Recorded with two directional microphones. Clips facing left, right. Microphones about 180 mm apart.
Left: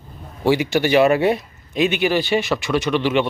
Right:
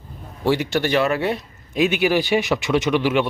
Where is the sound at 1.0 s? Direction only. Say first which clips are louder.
Left 5 dB; 15° left (ahead or behind).